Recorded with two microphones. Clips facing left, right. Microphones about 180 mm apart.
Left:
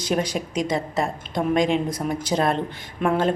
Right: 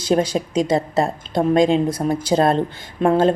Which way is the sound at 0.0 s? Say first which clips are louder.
Right 6 dB; 30° right (ahead or behind).